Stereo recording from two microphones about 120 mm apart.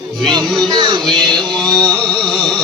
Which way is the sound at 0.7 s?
40° right (ahead or behind).